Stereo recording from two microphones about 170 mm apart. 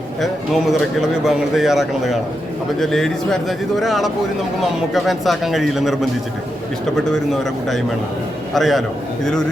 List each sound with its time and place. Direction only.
0.2 s speech: centre (ahead or behind)
7.1 s speech: centre (ahead or behind)